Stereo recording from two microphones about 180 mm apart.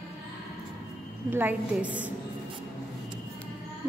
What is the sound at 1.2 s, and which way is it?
Speech, 10° right (ahead or behind).